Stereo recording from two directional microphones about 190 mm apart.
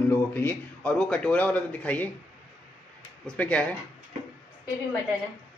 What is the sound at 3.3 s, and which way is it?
Speech, 5° left (ahead or behind).